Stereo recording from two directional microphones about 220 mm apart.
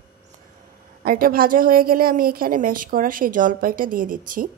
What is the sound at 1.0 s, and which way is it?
A woman's voice, 40° right (ahead or behind).